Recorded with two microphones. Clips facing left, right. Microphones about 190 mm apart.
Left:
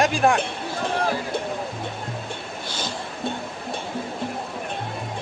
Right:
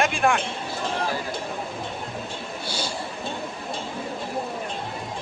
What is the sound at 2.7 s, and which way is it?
Music, 10° right (ahead or behind).